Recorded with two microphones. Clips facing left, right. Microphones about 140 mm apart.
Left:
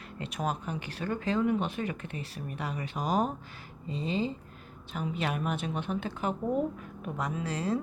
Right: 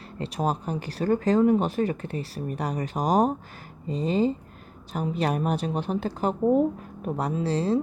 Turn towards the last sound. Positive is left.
turn(degrees=-30)  # may be behind; listen again after turning